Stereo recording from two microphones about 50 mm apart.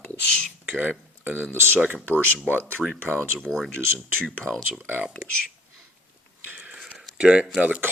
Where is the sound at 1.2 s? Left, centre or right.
Right.